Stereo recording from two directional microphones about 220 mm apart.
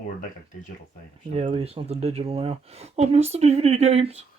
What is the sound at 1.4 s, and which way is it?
Speech, 30° right (ahead or behind).